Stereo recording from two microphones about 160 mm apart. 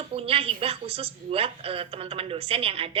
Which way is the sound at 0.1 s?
35° right (ahead or behind).